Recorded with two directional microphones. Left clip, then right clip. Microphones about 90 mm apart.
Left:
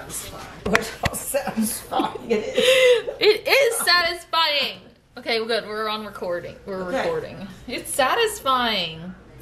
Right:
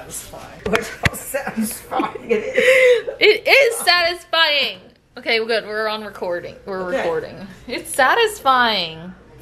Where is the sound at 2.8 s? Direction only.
15° right (ahead or behind).